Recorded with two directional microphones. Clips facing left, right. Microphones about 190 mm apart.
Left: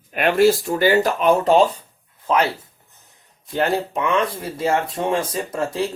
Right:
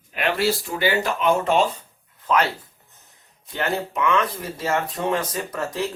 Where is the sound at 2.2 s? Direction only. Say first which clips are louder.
Left 2 dB; 25° left (ahead or behind).